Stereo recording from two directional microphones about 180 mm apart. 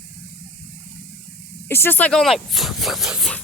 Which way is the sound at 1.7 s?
10° left (ahead or behind).